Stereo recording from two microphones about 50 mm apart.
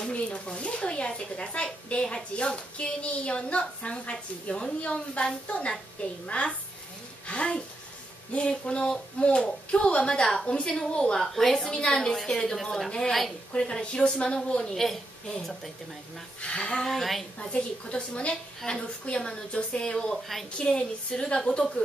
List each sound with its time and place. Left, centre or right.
0.0 s speech: left; by 11.7 s centre
11.7 s speech: centre
13.5 s speech: centre
14.7 s a woman's voice: centre
16.3 s speech: left
16.8 s a woman's voice: centre
17.4 s speech: centre